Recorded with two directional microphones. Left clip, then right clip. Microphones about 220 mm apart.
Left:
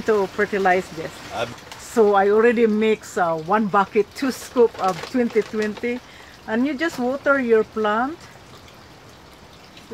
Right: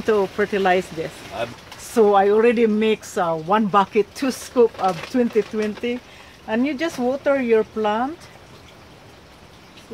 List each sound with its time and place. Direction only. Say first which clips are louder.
0.0 s speech: even; 15° right (ahead or behind)
2.0 s speech: right 1 dB; 10° right (ahead or behind)